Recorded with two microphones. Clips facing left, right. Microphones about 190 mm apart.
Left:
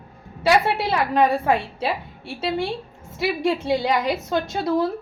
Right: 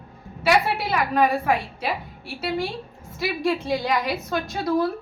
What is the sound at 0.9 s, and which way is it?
A woman's voice, 30° left (ahead or behind).